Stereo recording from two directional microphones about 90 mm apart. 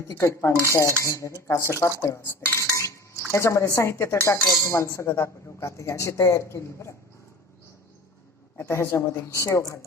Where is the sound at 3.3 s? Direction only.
30° left (ahead or behind).